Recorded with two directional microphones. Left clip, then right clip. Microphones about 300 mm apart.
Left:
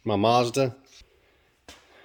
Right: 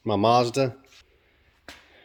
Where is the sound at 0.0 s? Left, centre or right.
Centre.